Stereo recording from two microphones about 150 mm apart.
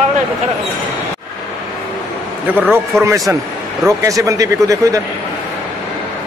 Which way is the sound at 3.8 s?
20° right (ahead or behind).